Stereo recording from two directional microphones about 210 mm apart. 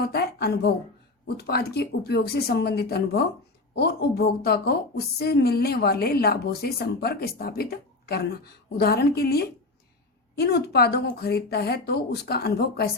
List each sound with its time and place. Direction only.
0.1 s a woman's voice: 50° left (ahead or behind)